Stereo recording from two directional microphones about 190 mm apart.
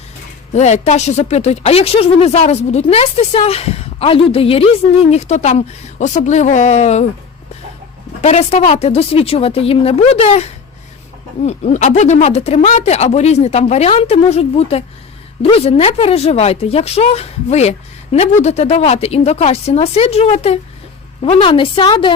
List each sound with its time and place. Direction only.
0.5 s speech: 35° left (ahead or behind)
8.2 s a woman's voice: 35° left (ahead or behind)